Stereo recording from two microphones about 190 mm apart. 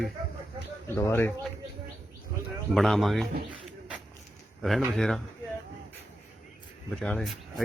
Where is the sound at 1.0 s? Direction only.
15° left (ahead or behind).